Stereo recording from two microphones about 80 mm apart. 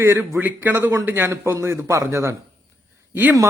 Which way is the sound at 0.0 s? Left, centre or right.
Right.